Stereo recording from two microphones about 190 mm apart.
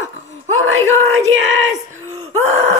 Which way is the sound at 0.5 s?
90° right.